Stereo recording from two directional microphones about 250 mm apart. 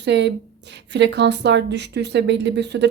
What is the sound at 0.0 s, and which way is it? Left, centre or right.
Speech, right.